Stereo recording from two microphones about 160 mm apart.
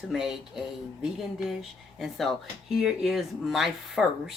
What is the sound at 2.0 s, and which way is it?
Speech, centre (ahead or behind).